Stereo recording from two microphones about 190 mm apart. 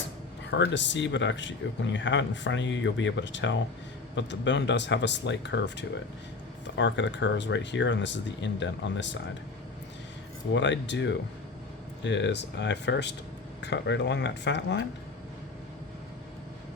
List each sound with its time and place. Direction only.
0.5 s speech: 70° left (ahead or behind)
10.5 s speech: 70° left (ahead or behind)